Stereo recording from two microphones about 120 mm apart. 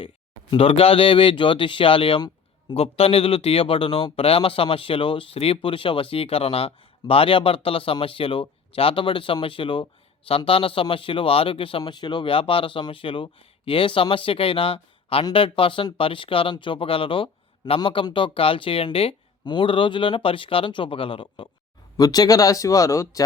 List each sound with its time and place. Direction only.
0.5 s speech: 50° left (ahead or behind)
2.7 s speech: 55° left (ahead or behind)
21.9 s speech: 30° left (ahead or behind)